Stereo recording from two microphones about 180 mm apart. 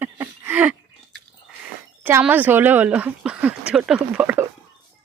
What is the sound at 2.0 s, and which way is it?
Speech, 10° right (ahead or behind).